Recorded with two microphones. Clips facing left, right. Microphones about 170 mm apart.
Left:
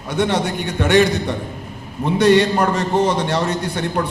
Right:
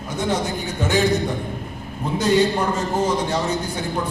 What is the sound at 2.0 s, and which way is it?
A man's voice, 70° left (ahead or behind).